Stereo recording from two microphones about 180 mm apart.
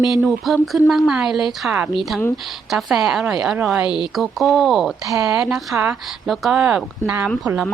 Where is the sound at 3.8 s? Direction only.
25° left (ahead or behind).